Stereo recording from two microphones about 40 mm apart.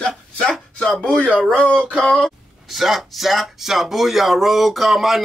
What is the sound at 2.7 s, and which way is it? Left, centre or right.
Speech, centre.